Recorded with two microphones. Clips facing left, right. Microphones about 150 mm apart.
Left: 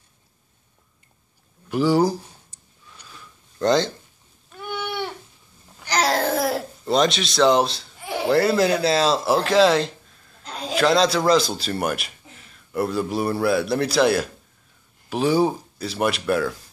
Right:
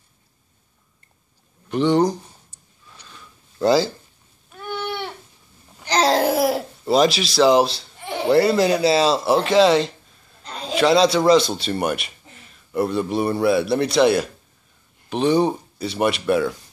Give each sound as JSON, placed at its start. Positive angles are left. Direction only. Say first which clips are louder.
{"t": 1.7, "sound": "speech", "louder": "right 1 dB", "side_deg": 5}
{"t": 3.0, "sound": "a sound", "louder": "even", "side_deg": 5}
{"t": 3.5, "sound": "speech", "louder": "right 2 dB", "side_deg": -5}
{"t": 4.6, "sound": "a sound", "louder": "right 1 dB", "side_deg": 10}
{"t": 5.8, "sound": "babbling", "louder": "right 4 dB", "side_deg": -25}
{"t": 6.2, "sound": "speech", "louder": "right 3 dB", "side_deg": -5}